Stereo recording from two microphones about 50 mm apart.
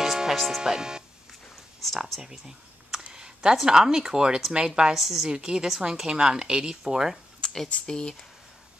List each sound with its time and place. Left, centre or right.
0.0 s music: centre
0.6 s a woman's voice: centre
1.8 s a woman's voice: centre
2.2 s a sound: centre
3.6 s a woman's voice: centre
4.9 s a woman's voice: centre
7.3 s a sound: centre
7.7 s speech: centre